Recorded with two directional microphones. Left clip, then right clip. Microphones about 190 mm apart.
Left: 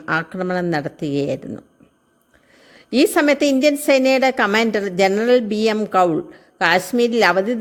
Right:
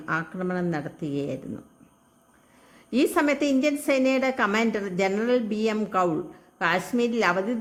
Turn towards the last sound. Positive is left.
turn(degrees=35)  # may be behind; listen again after turning